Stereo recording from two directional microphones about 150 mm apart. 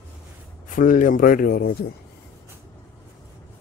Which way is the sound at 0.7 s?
60° left (ahead or behind).